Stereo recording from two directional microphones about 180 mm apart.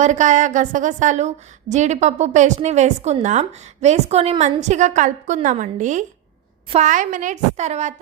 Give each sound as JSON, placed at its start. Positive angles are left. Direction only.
{"t": 0.0, "sound": "a woman's voice", "side_deg": -40}